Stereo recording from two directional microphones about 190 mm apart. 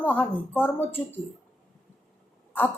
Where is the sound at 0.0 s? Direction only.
10° left (ahead or behind).